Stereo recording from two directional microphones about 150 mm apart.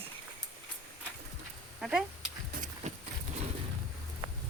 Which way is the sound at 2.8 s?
50° right (ahead or behind).